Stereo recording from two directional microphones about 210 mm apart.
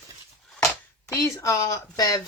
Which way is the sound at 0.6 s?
15° left (ahead or behind).